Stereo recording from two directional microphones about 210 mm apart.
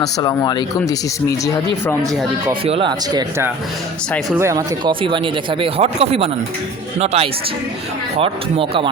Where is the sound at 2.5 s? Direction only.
25° right (ahead or behind).